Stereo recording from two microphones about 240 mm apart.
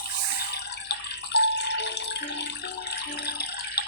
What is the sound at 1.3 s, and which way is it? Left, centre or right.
Music, left.